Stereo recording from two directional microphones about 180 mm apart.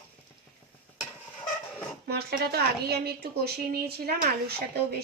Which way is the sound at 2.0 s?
60° right (ahead or behind).